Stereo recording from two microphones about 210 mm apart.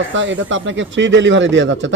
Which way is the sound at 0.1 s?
60° right (ahead or behind).